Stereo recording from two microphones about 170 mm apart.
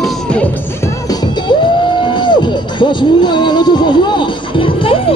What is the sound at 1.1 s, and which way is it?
Music, 25° left (ahead or behind).